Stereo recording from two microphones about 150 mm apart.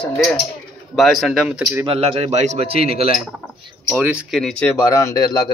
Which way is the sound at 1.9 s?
40° right (ahead or behind).